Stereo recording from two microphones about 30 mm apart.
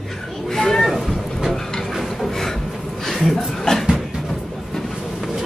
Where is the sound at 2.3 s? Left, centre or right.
Centre.